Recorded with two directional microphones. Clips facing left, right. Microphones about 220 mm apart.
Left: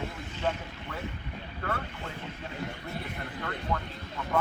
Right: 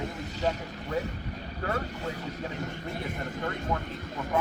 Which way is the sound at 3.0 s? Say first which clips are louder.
Right 4 dB; 45° right (ahead or behind).